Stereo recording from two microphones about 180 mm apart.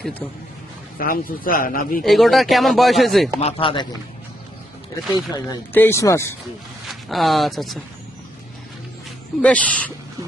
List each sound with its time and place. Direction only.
0.0 s speech: 10° left (ahead or behind)
0.9 s speech: 50° left (ahead or behind)
2.0 s speech: centre (ahead or behind)
3.4 s speech: 30° left (ahead or behind)
5.1 s speech: 20° left (ahead or behind)
6.8 s speech: centre (ahead or behind)
9.4 s speech: 5° left (ahead or behind)